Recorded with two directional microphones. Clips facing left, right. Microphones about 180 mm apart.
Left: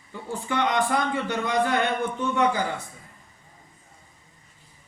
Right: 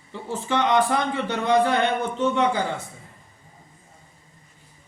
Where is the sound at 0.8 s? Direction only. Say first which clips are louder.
Right 1 dB; 20° right (ahead or behind).